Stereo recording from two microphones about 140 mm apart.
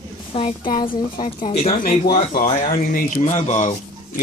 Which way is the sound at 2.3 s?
65° left (ahead or behind).